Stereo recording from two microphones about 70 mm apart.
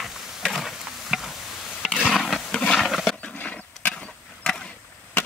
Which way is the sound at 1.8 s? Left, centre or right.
Centre.